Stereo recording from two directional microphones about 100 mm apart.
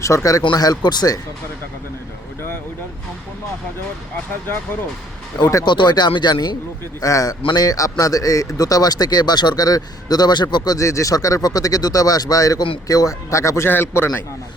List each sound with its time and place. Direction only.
0.0 s a man's voice: 30° left (ahead or behind)
5.6 s speech: 45° left (ahead or behind)
7.0 s a man's voice: 35° left (ahead or behind)